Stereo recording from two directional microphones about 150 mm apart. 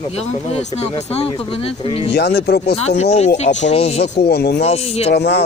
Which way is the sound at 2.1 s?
90° left.